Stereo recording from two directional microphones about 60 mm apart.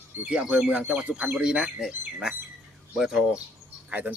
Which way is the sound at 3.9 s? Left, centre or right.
Right.